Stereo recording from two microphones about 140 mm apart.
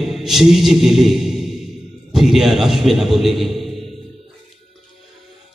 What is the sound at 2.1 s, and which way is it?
A man's voice, centre (ahead or behind).